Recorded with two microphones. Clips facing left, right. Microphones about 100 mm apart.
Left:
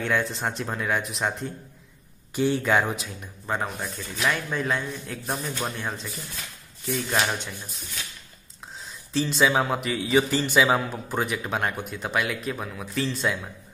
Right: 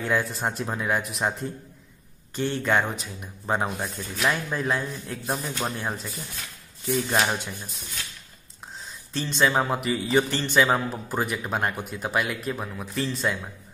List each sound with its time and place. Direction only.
0.0 s a man's voice: 5° right (ahead or behind)
2.3 s a man's voice: 10° left (ahead or behind)
3.4 s speech: 20° right (ahead or behind)
3.8 s a man's voice: 5° right (ahead or behind)
6.9 s a man's voice: 5° right (ahead or behind)
9.1 s a man's voice: 5° left (ahead or behind)